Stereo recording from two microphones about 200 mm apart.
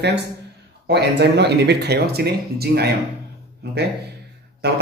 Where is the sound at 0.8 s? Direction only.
55° right (ahead or behind).